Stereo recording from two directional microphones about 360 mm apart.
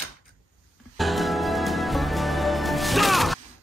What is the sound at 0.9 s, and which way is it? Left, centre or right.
Music, centre.